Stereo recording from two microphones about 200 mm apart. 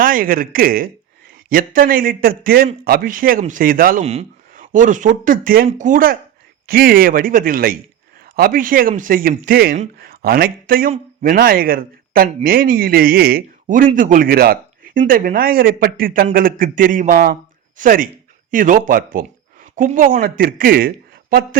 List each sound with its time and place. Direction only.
0.0 s speech: 45° right (ahead or behind)